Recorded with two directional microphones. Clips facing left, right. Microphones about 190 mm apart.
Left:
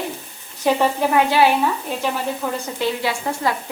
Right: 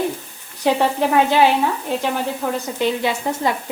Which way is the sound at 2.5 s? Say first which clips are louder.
Right 2 dB; 20° right (ahead or behind).